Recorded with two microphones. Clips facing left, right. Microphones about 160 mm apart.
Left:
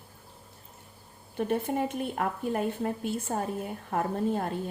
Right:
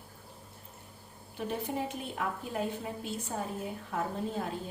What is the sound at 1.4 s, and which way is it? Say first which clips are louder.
A woman's voice: left 6 dB; 55° left (ahead or behind).